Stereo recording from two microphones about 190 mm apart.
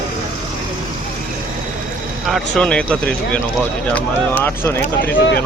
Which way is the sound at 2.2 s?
Centre (ahead or behind).